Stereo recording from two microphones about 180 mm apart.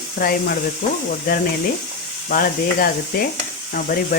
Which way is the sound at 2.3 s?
55° left (ahead or behind).